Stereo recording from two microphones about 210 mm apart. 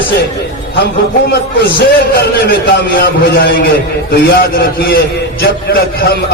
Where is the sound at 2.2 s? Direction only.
45° left (ahead or behind).